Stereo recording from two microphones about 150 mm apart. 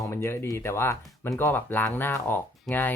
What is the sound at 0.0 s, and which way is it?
Speech, 15° left (ahead or behind).